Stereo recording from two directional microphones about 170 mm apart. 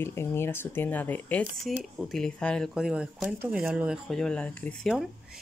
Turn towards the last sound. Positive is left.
turn(degrees=5)  # may be behind; listen again after turning